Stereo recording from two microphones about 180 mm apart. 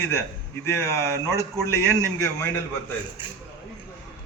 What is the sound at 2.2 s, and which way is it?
Speech, 15° left (ahead or behind).